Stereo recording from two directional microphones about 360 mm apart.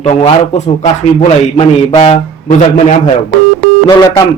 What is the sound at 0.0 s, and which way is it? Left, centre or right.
A man's voice, centre.